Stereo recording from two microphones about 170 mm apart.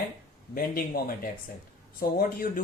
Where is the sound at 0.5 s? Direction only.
60° left (ahead or behind).